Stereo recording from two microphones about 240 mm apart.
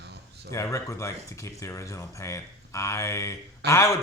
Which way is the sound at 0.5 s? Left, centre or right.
Centre.